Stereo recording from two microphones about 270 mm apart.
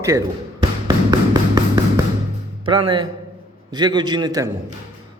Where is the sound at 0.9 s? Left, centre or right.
Centre.